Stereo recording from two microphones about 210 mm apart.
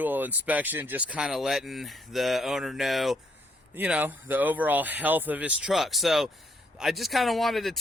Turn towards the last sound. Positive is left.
turn(degrees=0)  # may be behind; listen again after turning